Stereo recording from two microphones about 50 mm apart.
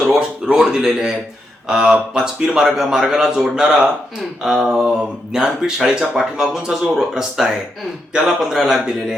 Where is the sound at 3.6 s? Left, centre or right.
Centre.